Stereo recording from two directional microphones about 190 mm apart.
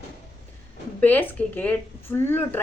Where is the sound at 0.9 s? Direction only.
10° left (ahead or behind).